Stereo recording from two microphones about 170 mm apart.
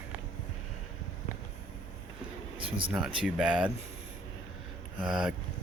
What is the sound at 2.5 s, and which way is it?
Speech, 30° right (ahead or behind).